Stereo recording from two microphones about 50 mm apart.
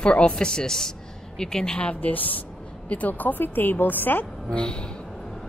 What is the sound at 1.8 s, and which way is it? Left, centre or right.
A woman's voice, left.